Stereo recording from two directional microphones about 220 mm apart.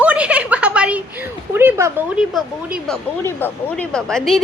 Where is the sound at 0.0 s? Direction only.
5° right (ahead or behind).